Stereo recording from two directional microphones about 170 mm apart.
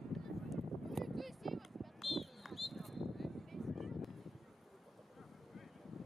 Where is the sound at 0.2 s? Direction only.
Centre (ahead or behind).